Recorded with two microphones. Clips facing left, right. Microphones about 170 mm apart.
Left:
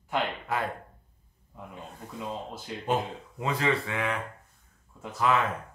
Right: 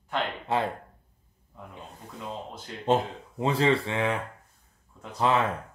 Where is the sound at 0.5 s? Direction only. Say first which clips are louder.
Right 5 dB; 25° right (ahead or behind).